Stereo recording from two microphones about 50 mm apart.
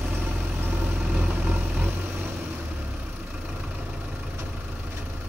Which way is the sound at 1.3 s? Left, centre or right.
Right.